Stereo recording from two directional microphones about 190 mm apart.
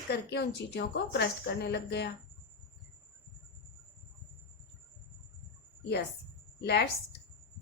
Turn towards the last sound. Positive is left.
turn(degrees=60)  # may be behind; listen again after turning